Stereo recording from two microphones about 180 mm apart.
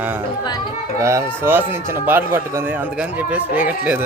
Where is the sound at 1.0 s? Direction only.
15° right (ahead or behind).